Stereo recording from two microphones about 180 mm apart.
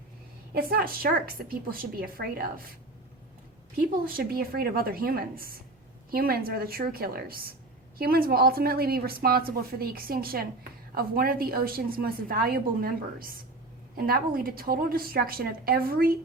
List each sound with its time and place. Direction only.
0.5 s a woman's voice: 55° right (ahead or behind)
3.8 s a woman's voice: 55° right (ahead or behind)